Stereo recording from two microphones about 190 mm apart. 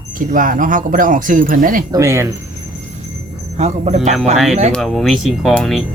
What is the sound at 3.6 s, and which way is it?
Speech, 35° right (ahead or behind).